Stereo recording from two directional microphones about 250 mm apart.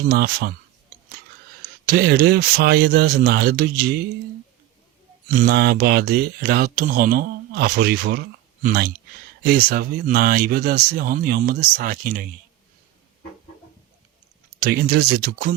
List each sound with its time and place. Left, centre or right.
0.0 s speech: right
1.9 s speech: right
5.4 s speech: right
14.6 s speech: right